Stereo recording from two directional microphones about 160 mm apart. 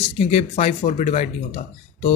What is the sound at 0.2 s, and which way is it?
A man's voice, 45° left (ahead or behind).